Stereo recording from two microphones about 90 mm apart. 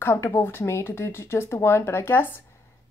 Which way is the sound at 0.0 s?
30° left (ahead or behind).